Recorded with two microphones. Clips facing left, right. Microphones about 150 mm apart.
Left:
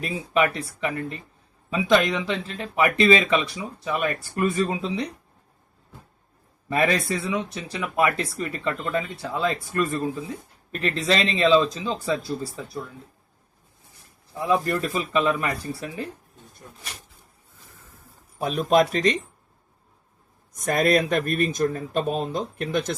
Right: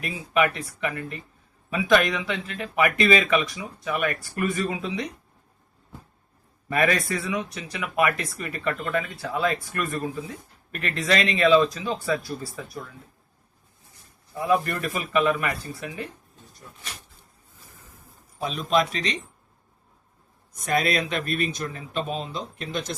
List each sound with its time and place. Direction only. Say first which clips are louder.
0.0 s speech: left 1 dB; 30° left (ahead or behind)
6.7 s speech: left 1 dB; 30° left (ahead or behind)
10.7 s speech: left 2 dB; 30° left (ahead or behind)
14.4 s speech: left 1 dB; 30° left (ahead or behind)
18.3 s speech: left 4 dB; 55° left (ahead or behind)
20.7 s speech: left 4 dB; 50° left (ahead or behind)